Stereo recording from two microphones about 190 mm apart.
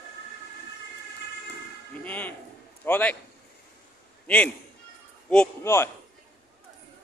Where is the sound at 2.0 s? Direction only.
10° left (ahead or behind).